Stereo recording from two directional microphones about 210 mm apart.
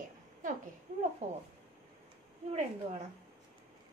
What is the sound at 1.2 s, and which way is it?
Speech, 30° right (ahead or behind).